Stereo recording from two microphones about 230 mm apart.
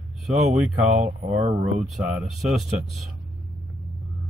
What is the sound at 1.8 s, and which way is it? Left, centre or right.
Speech, centre.